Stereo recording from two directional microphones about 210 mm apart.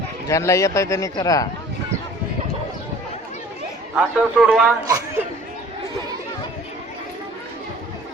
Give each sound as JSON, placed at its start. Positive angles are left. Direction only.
{"t": 0.3, "sound": "speech", "side_deg": 15}
{"t": 3.9, "sound": "a man's voice", "side_deg": 0}
{"t": 4.9, "sound": "speech", "side_deg": -15}